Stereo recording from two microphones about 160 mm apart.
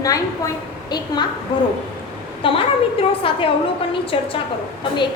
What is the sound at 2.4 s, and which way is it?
A woman's voice, 35° left (ahead or behind).